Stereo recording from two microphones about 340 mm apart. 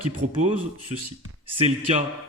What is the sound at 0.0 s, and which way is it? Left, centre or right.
Speech, right.